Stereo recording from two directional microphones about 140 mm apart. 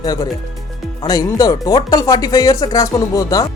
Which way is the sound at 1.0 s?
25° left (ahead or behind).